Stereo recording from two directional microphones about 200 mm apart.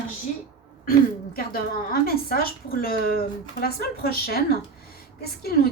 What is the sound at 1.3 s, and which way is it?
A woman's voice, 50° left (ahead or behind).